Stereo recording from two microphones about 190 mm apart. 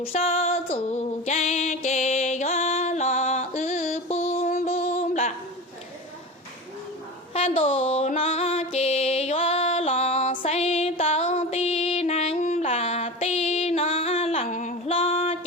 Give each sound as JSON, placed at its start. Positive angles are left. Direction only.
{"t": 0.0, "sound": "music", "side_deg": 30}
{"t": 4.6, "sound": "a sound", "side_deg": 35}
{"t": 7.3, "sound": "music", "side_deg": 30}